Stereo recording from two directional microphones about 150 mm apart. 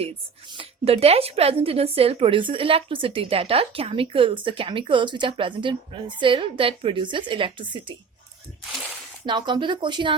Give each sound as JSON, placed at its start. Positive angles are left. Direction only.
{"t": 0.0, "sound": "a woman's voice", "side_deg": -35}
{"t": 9.2, "sound": "a woman's voice", "side_deg": -30}